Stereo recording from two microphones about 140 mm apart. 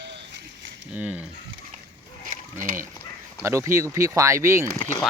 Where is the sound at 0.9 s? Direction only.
10° right (ahead or behind).